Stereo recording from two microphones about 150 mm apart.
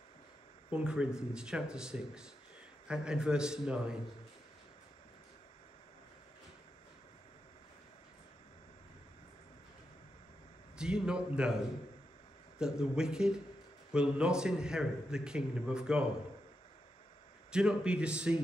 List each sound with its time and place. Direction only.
0.7 s a man's voice: 10° right (ahead or behind)
10.8 s a man's voice: 5° right (ahead or behind)
17.5 s a man's voice: 5° right (ahead or behind)